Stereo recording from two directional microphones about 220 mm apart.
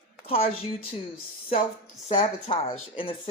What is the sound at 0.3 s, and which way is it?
Speech, 25° left (ahead or behind).